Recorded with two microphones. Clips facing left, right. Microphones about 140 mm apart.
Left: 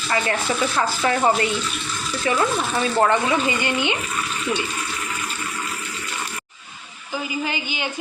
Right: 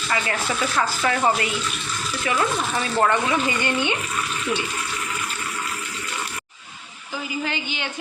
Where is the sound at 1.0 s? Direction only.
30° left (ahead or behind).